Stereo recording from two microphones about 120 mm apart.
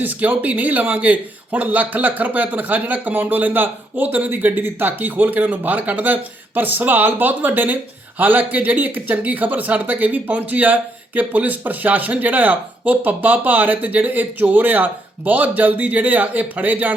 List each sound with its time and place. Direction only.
0.0 s a man's voice: 15° right (ahead or behind)